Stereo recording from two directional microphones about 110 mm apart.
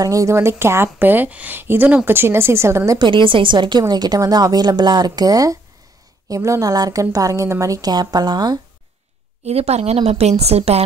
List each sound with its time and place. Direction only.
0.0 s a woman's voice: 30° right (ahead or behind)
3.0 s a woman's voice: 50° right (ahead or behind)
9.5 s a woman's voice: 70° right (ahead or behind)